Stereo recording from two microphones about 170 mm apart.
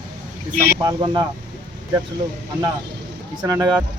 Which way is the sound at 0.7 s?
20° right (ahead or behind).